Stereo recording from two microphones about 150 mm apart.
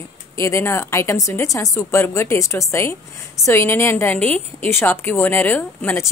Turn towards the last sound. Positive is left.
turn(degrees=15)  # may be behind; listen again after turning